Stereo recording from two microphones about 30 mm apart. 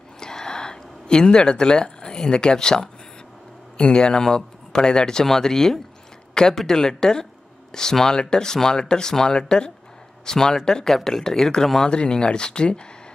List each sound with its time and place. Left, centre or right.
0.2 s a sound: left
1.3 s speech: left
11.9 s speech: left